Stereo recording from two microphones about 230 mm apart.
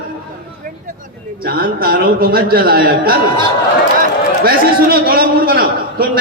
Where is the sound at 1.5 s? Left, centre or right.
Right.